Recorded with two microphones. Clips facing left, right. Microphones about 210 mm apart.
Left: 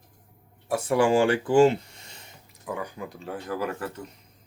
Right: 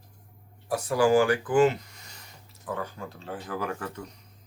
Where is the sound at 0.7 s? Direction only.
25° left (ahead or behind).